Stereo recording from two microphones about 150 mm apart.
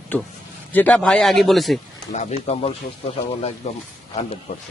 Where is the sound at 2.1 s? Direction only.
50° left (ahead or behind).